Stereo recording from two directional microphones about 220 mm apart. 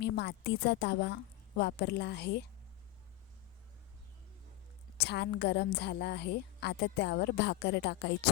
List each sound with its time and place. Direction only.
0.0 s a woman's voice: 50° left (ahead or behind)
4.9 s a woman's voice: 50° left (ahead or behind)